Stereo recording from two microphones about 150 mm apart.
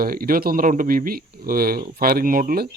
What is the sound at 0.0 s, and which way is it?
Speech, 75° right (ahead or behind).